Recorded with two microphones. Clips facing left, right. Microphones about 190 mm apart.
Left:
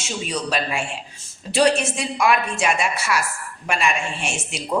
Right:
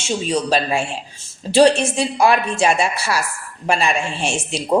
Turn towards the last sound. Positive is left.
turn(degrees=-30)  # may be behind; listen again after turning